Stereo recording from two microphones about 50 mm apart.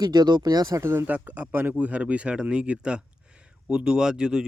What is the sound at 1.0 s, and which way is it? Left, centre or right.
Speech, right.